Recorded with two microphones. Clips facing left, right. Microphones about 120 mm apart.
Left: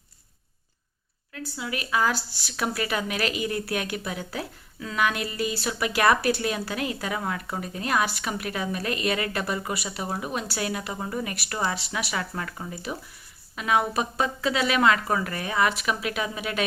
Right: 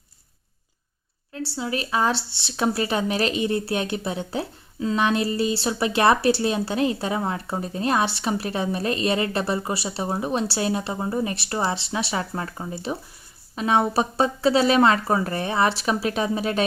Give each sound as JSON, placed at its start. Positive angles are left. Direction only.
{"t": 1.5, "sound": "a woman's voice", "side_deg": -30}